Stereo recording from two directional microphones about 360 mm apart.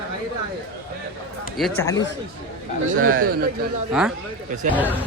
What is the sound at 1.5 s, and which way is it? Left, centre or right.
Speech, centre.